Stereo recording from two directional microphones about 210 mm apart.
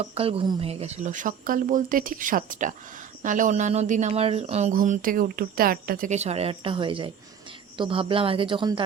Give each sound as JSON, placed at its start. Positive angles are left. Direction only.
{"t": 0.0, "sound": "speech", "side_deg": -30}